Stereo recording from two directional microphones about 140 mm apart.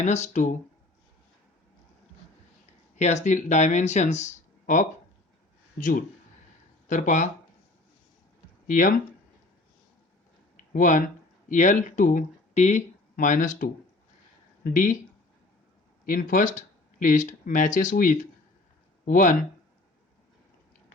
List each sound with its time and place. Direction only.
0.0 s speech: 55° left (ahead or behind)
2.9 s speech: 55° left (ahead or behind)
5.7 s a man's voice: 75° left (ahead or behind)
8.6 s speech: 75° left (ahead or behind)
10.8 s speech: 70° left (ahead or behind)
16.0 s speech: 80° left